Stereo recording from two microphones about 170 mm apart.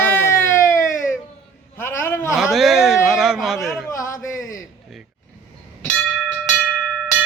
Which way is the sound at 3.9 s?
20° left (ahead or behind).